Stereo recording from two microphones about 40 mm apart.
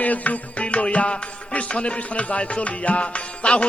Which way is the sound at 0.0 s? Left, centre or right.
Left.